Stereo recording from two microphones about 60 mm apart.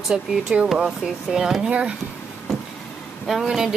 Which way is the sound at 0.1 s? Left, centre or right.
Centre.